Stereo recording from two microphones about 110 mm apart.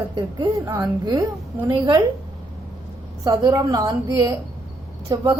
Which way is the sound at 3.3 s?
35° right (ahead or behind).